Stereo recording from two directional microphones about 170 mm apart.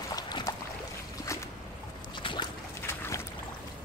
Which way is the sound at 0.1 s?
20° left (ahead or behind).